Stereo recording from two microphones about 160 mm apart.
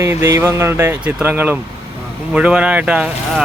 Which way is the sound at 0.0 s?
15° right (ahead or behind).